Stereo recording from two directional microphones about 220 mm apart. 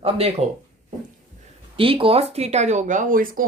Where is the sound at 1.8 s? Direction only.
25° right (ahead or behind).